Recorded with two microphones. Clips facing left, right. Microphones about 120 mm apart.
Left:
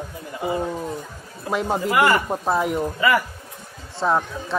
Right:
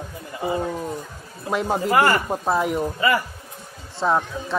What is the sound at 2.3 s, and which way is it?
Speech, centre (ahead or behind).